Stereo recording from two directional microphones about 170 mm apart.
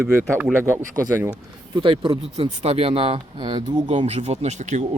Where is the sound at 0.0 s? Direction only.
15° right (ahead or behind).